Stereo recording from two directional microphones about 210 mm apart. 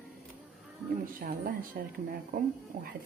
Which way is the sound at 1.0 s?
40° right (ahead or behind).